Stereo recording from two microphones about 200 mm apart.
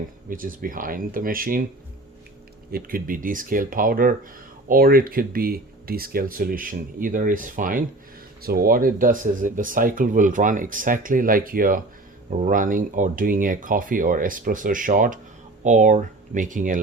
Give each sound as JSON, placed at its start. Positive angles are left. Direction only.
{"t": 0.3, "sound": "speech", "side_deg": -45}
{"t": 2.7, "sound": "speech", "side_deg": -45}